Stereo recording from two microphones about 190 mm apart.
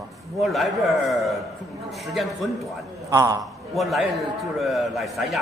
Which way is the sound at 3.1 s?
20° right (ahead or behind).